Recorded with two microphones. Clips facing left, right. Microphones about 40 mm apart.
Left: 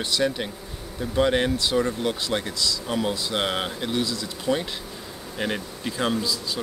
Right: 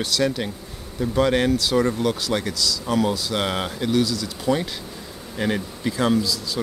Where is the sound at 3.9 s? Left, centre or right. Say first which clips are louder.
Right 9 dB; left.